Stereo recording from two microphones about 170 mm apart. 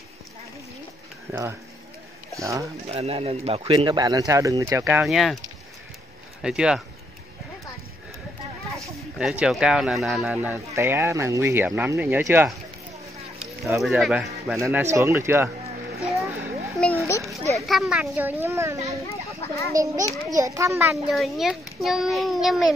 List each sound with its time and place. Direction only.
1.3 s speech: 15° right (ahead or behind)
2.9 s speech: 35° right (ahead or behind)
3.7 s speech: 25° right (ahead or behind)
5.0 s speech: centre (ahead or behind)
6.4 s speech: 5° right (ahead or behind)
9.2 s speech: 5° right (ahead or behind)
13.7 s speech: centre (ahead or behind)
14.8 s speech: 15° right (ahead or behind)
16.8 s children playing: 5° left (ahead or behind)
17.6 s speech: centre (ahead or behind); by 18.9 s 15° right (ahead or behind)
19.0 s speech: 20° left (ahead or behind)
19.7 s speech: 20° right (ahead or behind)
21.1 s speech: centre (ahead or behind)